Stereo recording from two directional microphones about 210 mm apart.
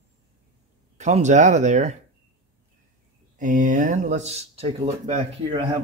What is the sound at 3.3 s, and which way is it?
Speech, 40° right (ahead or behind).